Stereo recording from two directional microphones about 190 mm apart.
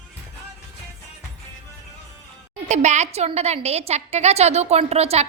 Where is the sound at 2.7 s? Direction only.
35° right (ahead or behind).